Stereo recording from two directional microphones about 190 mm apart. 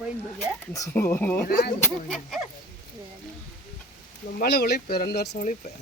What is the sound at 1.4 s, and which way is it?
Speech, 55° left (ahead or behind).